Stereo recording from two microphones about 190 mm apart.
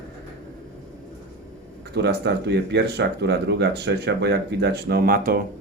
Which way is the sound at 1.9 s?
60° right (ahead or behind).